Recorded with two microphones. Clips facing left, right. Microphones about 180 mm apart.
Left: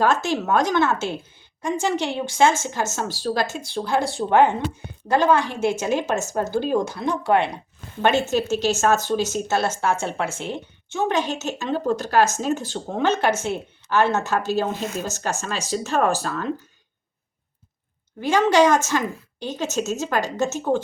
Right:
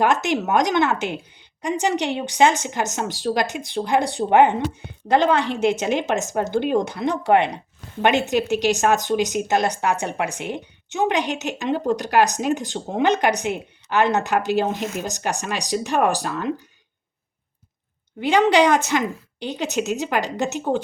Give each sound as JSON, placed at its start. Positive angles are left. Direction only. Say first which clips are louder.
{"t": 0.0, "sound": "a woman's voice", "louder": "right 1 dB", "side_deg": -20}
{"t": 18.2, "sound": "speech", "louder": "right 1 dB", "side_deg": -15}